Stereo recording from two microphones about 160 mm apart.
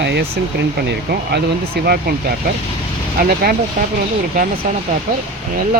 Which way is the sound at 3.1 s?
65° right (ahead or behind).